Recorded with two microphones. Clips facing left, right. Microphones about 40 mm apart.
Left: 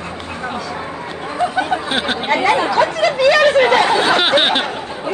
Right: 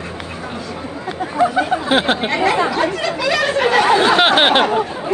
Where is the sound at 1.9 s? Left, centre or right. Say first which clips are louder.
Right 4 dB; centre.